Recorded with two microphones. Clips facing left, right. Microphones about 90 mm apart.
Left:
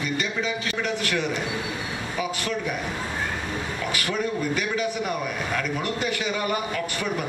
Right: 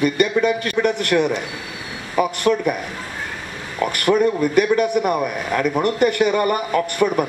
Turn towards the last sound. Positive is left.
turn(degrees=-55)  # may be behind; listen again after turning